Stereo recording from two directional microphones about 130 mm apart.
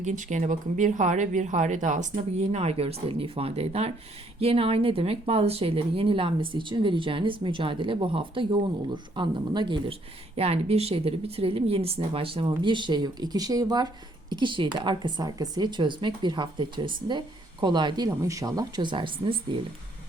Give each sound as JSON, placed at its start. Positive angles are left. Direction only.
{"t": 0.0, "sound": "speech", "side_deg": -70}